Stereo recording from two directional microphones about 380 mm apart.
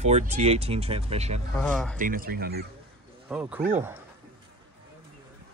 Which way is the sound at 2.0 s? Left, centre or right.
Right.